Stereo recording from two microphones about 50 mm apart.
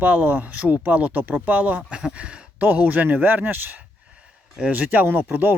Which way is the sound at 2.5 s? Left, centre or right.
Right.